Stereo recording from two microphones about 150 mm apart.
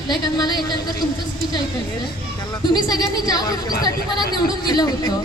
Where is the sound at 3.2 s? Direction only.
25° left (ahead or behind).